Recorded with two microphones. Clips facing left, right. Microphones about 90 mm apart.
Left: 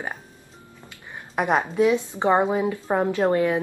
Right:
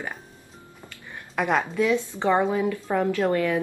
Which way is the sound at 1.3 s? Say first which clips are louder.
Left 2 dB; 20° left (ahead or behind).